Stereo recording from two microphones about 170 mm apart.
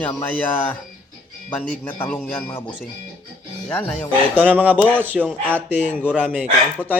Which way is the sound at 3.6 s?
10° left (ahead or behind).